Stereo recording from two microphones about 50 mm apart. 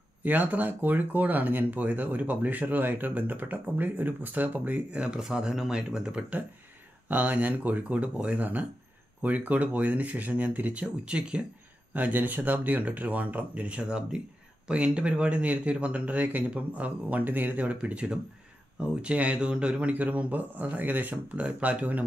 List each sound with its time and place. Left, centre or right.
0.2 s speech: right
5.2 s speech: centre
7.1 s speech: right
11.9 s speech: right